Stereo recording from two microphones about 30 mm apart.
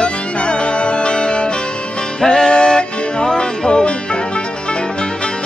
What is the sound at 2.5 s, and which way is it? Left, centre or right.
Music, left.